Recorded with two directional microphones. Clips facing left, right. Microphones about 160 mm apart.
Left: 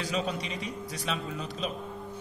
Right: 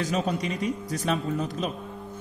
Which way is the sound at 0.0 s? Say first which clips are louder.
Right 5 dB; 45° right (ahead or behind).